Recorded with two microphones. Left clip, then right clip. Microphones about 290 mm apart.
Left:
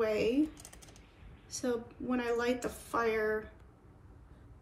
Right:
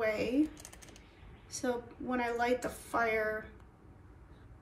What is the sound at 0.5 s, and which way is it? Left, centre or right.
Typing, centre.